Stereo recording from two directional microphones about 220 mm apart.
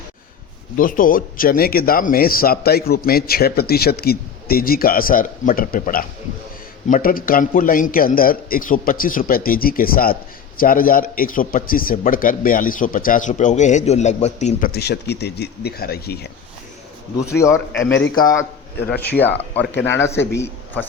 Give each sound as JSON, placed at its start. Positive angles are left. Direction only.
{"t": 0.8, "sound": "a man's voice", "side_deg": 40}
{"t": 14.7, "sound": "speech", "side_deg": 50}
{"t": 17.2, "sound": "a man's voice", "side_deg": 15}
{"t": 18.3, "sound": "a man's voice", "side_deg": 50}
{"t": 19.8, "sound": "a man's voice", "side_deg": 10}